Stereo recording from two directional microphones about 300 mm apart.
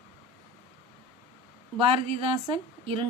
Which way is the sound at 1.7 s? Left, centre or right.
Centre.